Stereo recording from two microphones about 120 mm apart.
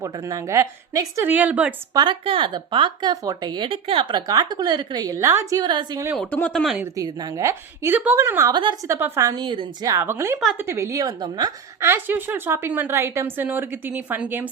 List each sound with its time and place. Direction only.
0.0 s a woman's voice: 25° right (ahead or behind); by 1.7 s 10° right (ahead or behind)
1.9 s speech: 35° right (ahead or behind)
2.2 s speech: 45° right (ahead or behind)
4.3 s speech: 35° right (ahead or behind)
5.6 s speech: 40° right (ahead or behind)
6.1 s speech: 10° left (ahead or behind)
6.8 s a woman's voice: 30° right (ahead or behind)
9.3 s speech: 40° right (ahead or behind)
9.8 s a woman's voice: 20° right (ahead or behind)
11.8 s a woman's voice: 20° right (ahead or behind)